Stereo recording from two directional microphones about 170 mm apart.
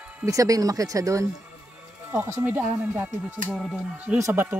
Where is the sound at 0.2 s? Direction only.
20° right (ahead or behind).